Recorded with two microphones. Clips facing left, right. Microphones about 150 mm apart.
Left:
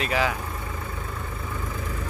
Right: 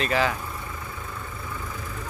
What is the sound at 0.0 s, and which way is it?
Speech, 5° left (ahead or behind).